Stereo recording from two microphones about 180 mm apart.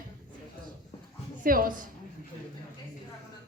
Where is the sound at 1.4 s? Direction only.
50° right (ahead or behind).